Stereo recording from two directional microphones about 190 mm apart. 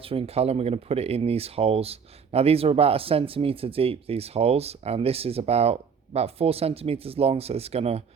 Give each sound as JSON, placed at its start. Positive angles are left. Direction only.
{"t": 0.1, "sound": "speech", "side_deg": -30}